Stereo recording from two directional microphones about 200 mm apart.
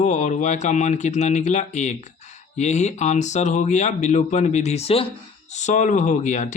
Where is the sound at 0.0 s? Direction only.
35° left (ahead or behind).